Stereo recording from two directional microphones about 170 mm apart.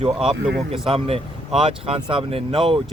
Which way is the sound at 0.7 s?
35° right (ahead or behind).